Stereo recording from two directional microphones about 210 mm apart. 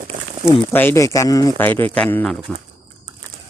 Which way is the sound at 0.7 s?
10° left (ahead or behind).